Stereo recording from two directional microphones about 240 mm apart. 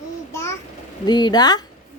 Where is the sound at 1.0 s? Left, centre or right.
Centre.